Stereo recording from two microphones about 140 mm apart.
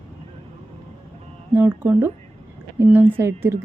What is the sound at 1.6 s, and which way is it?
Speech, 15° right (ahead or behind).